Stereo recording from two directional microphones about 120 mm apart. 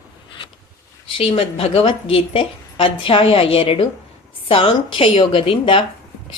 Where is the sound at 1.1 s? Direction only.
50° left (ahead or behind).